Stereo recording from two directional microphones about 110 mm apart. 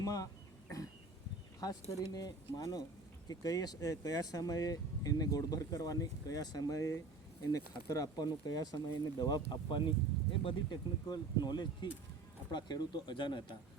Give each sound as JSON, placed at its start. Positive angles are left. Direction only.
{"t": 0.0, "sound": "speech", "side_deg": 30}
{"t": 1.6, "sound": "speech", "side_deg": 35}